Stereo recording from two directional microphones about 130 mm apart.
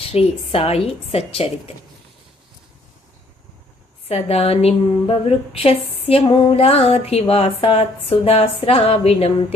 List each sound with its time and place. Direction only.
0.0 s a woman's voice: 50° left (ahead or behind)
4.1 s a woman's voice: 50° left (ahead or behind)